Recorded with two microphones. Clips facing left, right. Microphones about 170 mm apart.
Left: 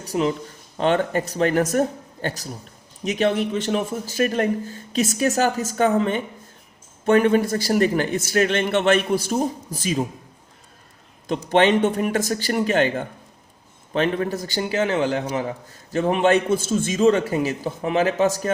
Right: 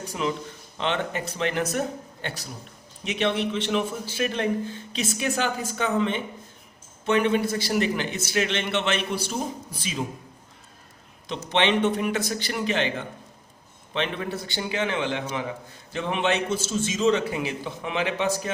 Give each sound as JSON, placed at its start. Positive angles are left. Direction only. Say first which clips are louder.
{"t": 0.1, "sound": "a man's voice", "louder": "left 7 dB", "side_deg": 40}
{"t": 11.3, "sound": "a man's voice", "louder": "left 6 dB", "side_deg": 45}